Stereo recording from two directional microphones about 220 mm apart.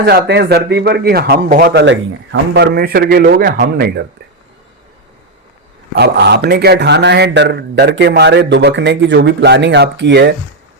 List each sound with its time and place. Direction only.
0.0 s a man's voice: 50° right (ahead or behind)
6.0 s a man's voice: 50° right (ahead or behind)